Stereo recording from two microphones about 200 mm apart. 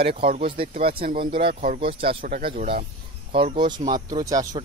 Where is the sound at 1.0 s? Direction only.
45° right (ahead or behind).